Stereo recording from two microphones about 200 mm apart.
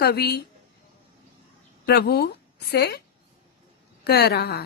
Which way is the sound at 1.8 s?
55° left (ahead or behind).